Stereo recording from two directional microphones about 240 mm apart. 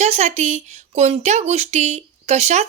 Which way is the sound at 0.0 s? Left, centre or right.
Right.